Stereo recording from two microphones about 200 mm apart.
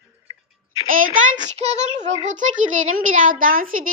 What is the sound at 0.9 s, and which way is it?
A child's voice, 45° right (ahead or behind).